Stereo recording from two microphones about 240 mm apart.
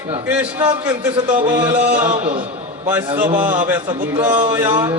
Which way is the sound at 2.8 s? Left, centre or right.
Centre.